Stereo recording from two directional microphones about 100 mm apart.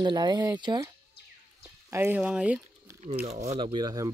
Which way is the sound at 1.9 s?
25° right (ahead or behind).